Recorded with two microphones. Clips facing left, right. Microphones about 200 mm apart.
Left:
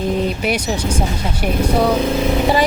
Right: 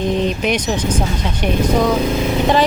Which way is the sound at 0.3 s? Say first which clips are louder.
Right 1 dB; 10° left (ahead or behind).